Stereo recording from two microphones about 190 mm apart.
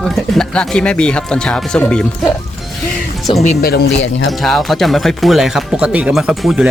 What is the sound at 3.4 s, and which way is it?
Speech, 55° left (ahead or behind).